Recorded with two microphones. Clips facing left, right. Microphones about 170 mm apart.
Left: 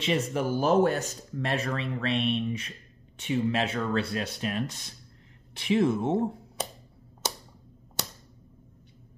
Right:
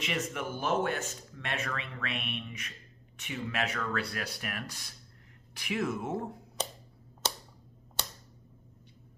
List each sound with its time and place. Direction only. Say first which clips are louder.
0.0 s speech: left 7 dB; 30° left (ahead or behind)